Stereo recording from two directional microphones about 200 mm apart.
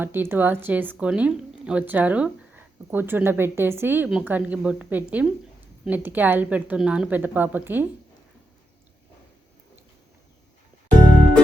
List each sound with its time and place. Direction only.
0.0 s a woman's voice: 10° right (ahead or behind)